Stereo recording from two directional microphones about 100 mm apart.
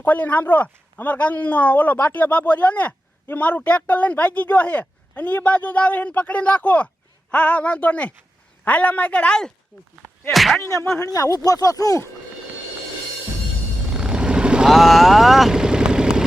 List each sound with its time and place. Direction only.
0.0 s speech: 15° left (ahead or behind)
10.2 s speech: centre (ahead or behind)
11.0 s speech: 35° left (ahead or behind)
13.9 s vehicle: 5° right (ahead or behind)